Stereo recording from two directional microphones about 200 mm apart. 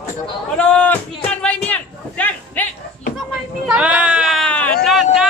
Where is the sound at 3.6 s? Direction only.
5° right (ahead or behind).